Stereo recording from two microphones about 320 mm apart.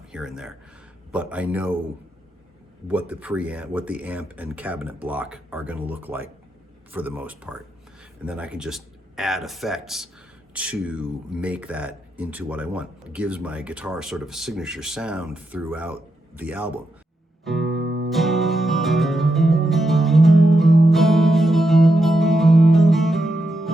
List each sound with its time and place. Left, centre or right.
0.1 s speech: centre
3.1 s speech: centre
17.4 s music: centre
17.7 s music: right
18.1 s music: centre